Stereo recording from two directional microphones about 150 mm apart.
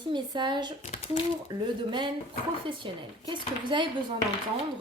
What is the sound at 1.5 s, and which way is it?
A woman's voice, 30° right (ahead or behind).